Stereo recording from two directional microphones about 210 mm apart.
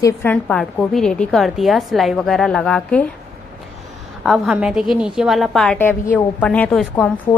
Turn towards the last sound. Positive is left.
turn(degrees=5)  # may be behind; listen again after turning